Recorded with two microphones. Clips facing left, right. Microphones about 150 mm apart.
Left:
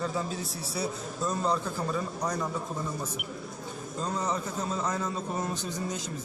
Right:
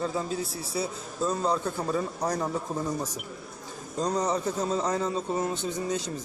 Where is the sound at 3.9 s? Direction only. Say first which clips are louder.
Right 5 dB; 40° right (ahead or behind).